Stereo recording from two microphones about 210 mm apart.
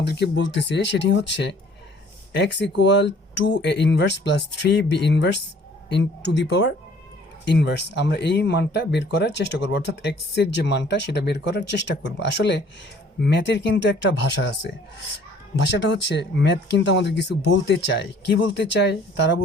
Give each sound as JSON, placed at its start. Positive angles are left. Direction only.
{"t": 0.0, "sound": "speech", "side_deg": 55}